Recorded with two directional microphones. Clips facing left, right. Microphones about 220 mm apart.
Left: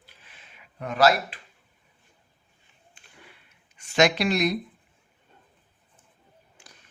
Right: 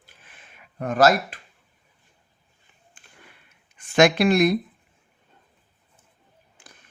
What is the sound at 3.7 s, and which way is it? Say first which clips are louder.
Speech: right 4 dB; 55° right (ahead or behind).